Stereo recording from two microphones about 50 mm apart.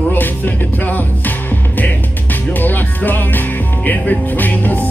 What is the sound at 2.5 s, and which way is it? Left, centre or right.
Music, left.